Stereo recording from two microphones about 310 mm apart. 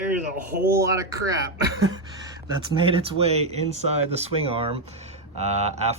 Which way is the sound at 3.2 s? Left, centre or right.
Centre.